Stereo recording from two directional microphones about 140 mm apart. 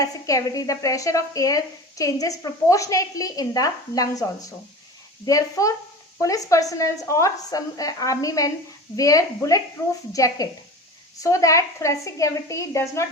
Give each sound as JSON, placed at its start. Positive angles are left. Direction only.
{"t": 0.0, "sound": "speech", "side_deg": 25}